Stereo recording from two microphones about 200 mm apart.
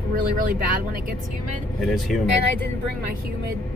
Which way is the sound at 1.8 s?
Centre (ahead or behind).